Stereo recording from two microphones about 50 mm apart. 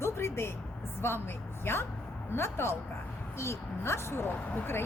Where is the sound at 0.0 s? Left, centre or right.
Left.